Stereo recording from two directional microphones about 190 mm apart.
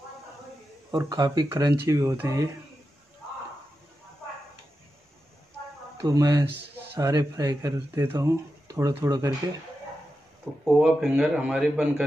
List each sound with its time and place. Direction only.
0.9 s speech: 20° right (ahead or behind)
6.0 s speech: 20° right (ahead or behind)
10.6 s speech: centre (ahead or behind)